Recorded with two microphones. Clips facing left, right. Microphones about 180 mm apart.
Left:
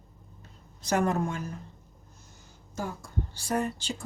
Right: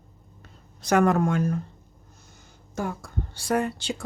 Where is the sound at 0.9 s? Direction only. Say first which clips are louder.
Right 6 dB; 75° right (ahead or behind).